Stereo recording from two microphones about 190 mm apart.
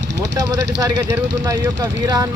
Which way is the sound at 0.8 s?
15° right (ahead or behind).